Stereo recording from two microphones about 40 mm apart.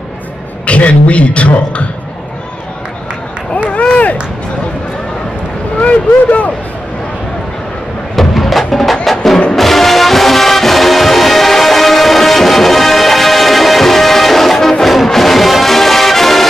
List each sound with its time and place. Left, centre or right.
0.7 s a man's voice: left
3.7 s run: left
5.8 s speech: left
8.2 s music: centre